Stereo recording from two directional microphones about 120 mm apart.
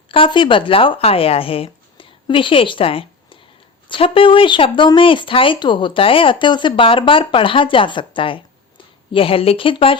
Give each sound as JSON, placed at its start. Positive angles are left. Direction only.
{"t": 0.1, "sound": "speech", "side_deg": 45}